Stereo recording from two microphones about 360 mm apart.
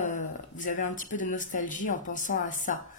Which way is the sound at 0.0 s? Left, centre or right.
Left.